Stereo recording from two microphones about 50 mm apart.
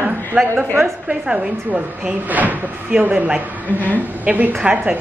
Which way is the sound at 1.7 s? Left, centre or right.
Right.